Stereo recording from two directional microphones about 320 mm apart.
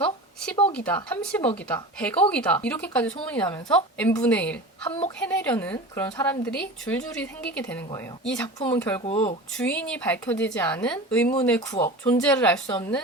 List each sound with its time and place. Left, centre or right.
0.7 s speech: centre
9.0 s speech: centre
9.6 s speech: centre